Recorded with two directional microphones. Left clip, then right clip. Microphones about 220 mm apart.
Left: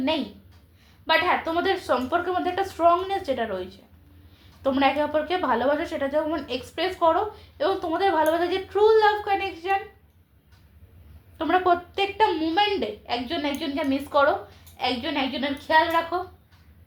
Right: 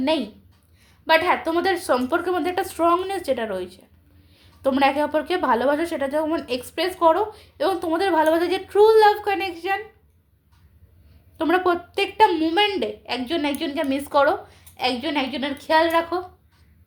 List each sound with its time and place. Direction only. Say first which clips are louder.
1.0 s a woman's voice: right 3 dB; 45° right (ahead or behind)
11.3 s a woman's voice: right 1 dB; 45° right (ahead or behind)